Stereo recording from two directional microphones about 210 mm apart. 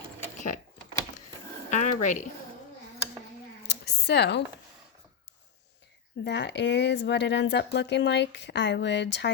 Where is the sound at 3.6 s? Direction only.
50° left (ahead or behind).